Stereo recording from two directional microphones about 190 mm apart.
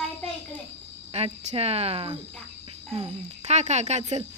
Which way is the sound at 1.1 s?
35° right (ahead or behind).